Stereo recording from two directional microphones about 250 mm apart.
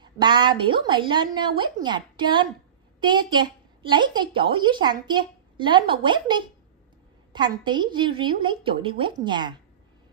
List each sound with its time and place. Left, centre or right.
0.0 s a woman's voice: centre